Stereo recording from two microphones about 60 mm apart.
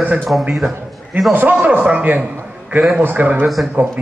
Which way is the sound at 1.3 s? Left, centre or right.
Right.